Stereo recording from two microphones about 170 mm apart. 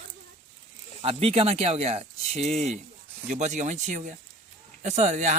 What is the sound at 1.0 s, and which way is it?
Speech, 35° right (ahead or behind).